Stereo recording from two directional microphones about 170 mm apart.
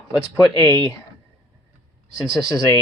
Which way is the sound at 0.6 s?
20° left (ahead or behind).